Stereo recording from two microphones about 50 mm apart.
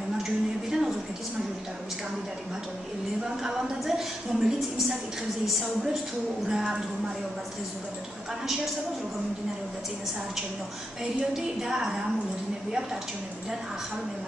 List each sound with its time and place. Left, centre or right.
0.2 s a sound: centre
3.3 s a woman's voice: centre
6.5 s a woman's voice: centre
11.1 s a woman's voice: centre